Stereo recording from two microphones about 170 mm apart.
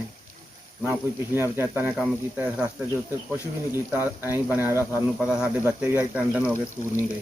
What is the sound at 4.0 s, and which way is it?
Speech, 10° right (ahead or behind).